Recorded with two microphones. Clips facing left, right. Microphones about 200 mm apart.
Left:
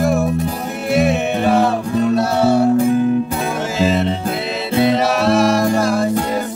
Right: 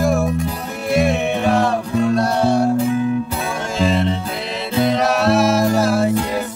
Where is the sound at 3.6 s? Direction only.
5° left (ahead or behind).